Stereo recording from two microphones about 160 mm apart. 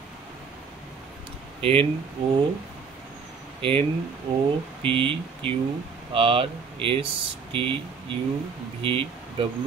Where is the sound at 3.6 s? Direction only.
35° right (ahead or behind).